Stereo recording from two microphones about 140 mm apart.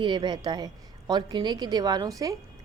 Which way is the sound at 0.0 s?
35° right (ahead or behind).